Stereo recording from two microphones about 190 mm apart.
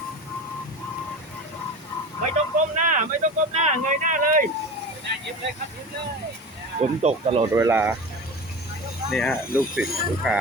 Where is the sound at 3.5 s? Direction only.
40° right (ahead or behind).